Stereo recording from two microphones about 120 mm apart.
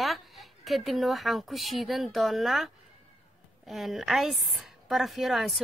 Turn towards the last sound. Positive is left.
turn(degrees=0)  # may be behind; listen again after turning